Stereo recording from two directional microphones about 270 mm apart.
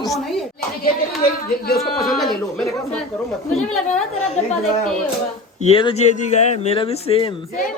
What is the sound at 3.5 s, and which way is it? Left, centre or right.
Speech, centre.